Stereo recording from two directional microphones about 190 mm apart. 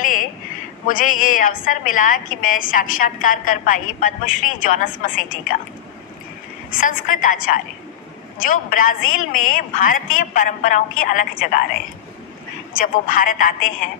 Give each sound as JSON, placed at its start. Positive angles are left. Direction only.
{"t": 0.0, "sound": "a sound", "side_deg": 45}
{"t": 0.8, "sound": "a woman's voice", "side_deg": 45}
{"t": 6.7, "sound": "a woman's voice", "side_deg": 45}
{"t": 12.7, "sound": "a woman's voice", "side_deg": 45}